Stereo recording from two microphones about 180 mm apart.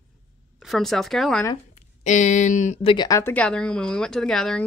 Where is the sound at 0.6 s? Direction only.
Centre (ahead or behind).